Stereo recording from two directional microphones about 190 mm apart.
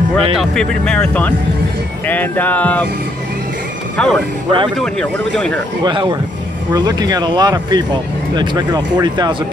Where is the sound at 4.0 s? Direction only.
5° left (ahead or behind).